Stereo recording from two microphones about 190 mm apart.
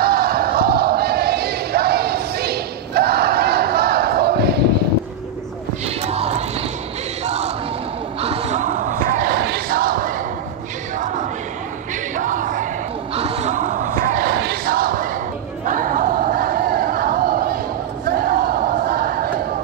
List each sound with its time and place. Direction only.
0.0 s crowd: 55° right (ahead or behind)
5.9 s music: 35° right (ahead or behind)
7.2 s crowd: 35° right (ahead or behind)
8.2 s basketball bounce: 30° right (ahead or behind); by 10.2 s 45° right (ahead or behind)
11.0 s choir: 40° right (ahead or behind)
12.2 s crowd: 40° right (ahead or behind)
13.1 s battle cry: 30° right (ahead or behind); by 15.0 s 50° right (ahead or behind)
15.6 s a sound: 45° right (ahead or behind)
18.0 s battle cry: 50° right (ahead or behind)